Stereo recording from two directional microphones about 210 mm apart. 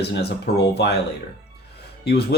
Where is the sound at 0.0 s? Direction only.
50° left (ahead or behind).